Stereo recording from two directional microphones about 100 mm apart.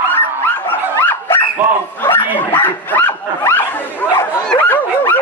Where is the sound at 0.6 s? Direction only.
20° left (ahead or behind).